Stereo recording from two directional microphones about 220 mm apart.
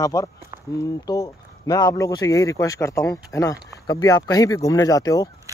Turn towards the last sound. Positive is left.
turn(degrees=15)  # may be behind; listen again after turning